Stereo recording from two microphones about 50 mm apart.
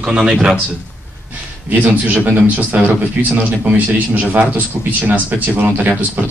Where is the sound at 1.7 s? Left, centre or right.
Right.